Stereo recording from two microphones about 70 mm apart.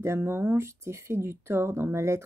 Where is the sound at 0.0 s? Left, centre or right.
Right.